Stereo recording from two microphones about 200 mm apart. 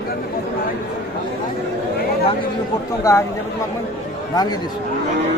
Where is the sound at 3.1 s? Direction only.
15° left (ahead or behind).